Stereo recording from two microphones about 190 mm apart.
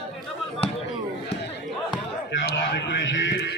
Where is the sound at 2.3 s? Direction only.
65° left (ahead or behind).